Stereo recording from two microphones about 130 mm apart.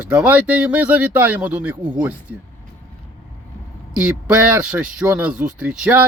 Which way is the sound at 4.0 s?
10° right (ahead or behind).